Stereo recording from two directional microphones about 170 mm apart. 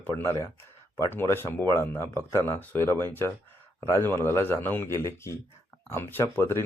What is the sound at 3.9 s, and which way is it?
Speech, 20° right (ahead or behind).